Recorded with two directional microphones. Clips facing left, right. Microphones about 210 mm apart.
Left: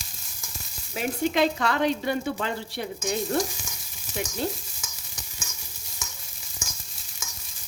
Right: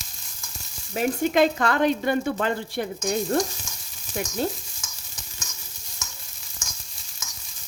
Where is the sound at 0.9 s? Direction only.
50° right (ahead or behind).